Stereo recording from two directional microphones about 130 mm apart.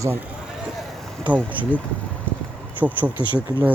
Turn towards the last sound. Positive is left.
turn(degrees=-15)  # may be behind; listen again after turning